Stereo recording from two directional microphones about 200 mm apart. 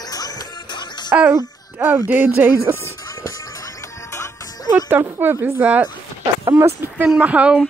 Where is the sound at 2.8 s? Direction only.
15° left (ahead or behind).